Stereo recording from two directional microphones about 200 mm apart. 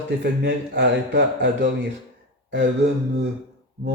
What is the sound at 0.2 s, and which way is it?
Speech, 60° right (ahead or behind).